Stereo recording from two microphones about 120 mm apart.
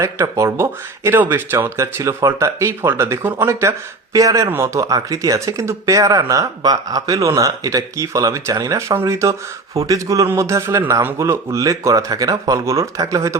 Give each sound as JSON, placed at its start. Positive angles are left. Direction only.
{"t": 0.0, "sound": "speech", "side_deg": -25}